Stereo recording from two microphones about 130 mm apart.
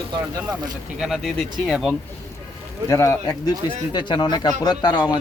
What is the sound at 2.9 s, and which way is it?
Speech, 25° left (ahead or behind).